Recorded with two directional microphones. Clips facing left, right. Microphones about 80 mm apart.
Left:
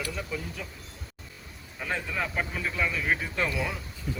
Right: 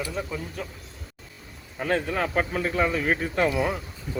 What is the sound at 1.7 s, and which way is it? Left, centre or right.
Speech, right.